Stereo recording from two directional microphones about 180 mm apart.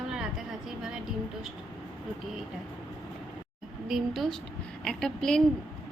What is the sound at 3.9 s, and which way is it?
A woman's voice, centre (ahead or behind).